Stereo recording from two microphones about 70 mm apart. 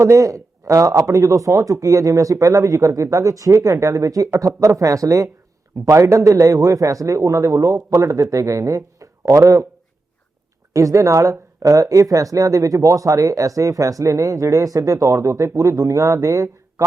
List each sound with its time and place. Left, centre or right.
0.0 s speech: right
10.8 s speech: right